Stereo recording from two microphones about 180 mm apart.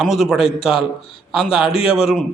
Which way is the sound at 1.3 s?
5° right (ahead or behind).